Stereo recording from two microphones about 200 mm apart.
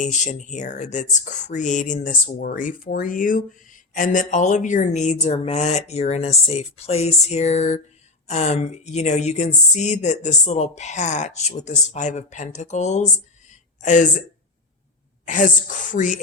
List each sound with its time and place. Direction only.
0.0 s speech: 40° left (ahead or behind)
13.5 s a sound: 40° left (ahead or behind)
15.3 s speech: 40° left (ahead or behind)